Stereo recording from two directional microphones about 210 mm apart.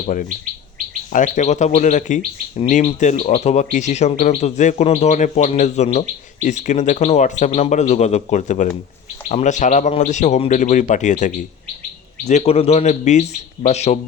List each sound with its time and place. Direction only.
1.1 s speech: 35° left (ahead or behind)